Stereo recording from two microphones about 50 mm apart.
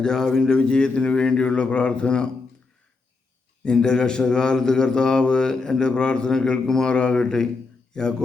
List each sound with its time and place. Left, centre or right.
0.0 s speech: centre
3.6 s a man's voice: centre